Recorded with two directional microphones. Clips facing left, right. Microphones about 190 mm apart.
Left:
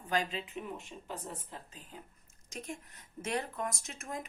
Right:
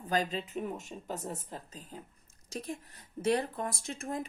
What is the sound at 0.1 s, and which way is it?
Speech, 40° right (ahead or behind).